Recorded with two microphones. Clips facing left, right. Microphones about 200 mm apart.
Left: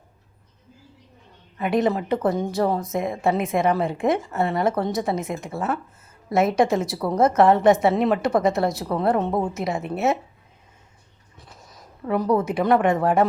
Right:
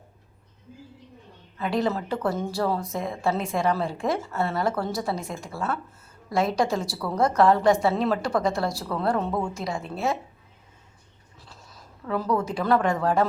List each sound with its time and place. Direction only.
1.5 s a woman's voice: 20° left (ahead or behind)
11.3 s a sound: 20° left (ahead or behind)
12.5 s speech: 20° left (ahead or behind)